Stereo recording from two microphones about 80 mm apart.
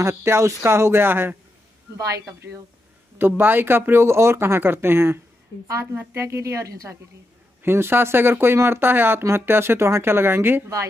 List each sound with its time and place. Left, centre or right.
0.0 s speech: right
2.0 s speech: right
3.2 s speech: right
7.6 s speech: right